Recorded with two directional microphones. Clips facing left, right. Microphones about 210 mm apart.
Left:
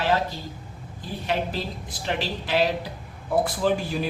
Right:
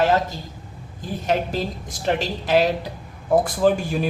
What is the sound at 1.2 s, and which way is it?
A woman's voice, 45° right (ahead or behind).